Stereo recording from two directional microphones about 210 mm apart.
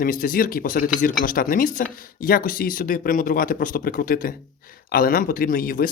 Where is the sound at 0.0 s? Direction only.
40° left (ahead or behind).